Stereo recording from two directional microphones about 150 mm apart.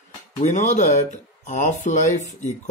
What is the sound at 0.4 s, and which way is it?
Speech, 50° left (ahead or behind).